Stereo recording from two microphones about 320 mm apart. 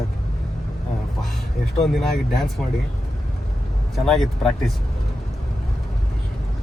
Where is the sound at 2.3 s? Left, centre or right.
Centre.